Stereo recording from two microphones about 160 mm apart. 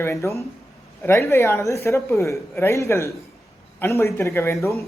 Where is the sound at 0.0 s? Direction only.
20° left (ahead or behind).